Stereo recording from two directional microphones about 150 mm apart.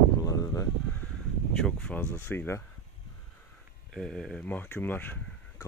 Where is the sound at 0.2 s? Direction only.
20° left (ahead or behind).